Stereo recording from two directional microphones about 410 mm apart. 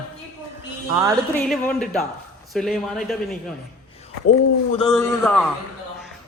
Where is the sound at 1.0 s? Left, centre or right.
Centre.